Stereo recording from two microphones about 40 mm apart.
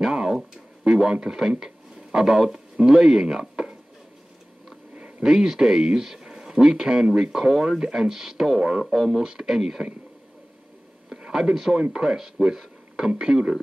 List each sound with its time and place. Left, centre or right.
0.0 s a sound: centre
0.3 s speech: centre
5.2 s speech: centre
11.3 s speech: centre